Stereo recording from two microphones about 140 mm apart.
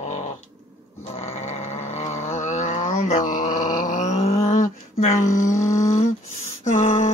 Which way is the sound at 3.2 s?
70° left (ahead or behind).